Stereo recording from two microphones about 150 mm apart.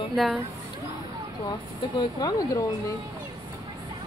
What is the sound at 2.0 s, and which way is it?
Speech, 25° left (ahead or behind).